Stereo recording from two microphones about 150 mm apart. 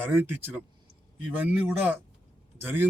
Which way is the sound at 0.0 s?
15° right (ahead or behind).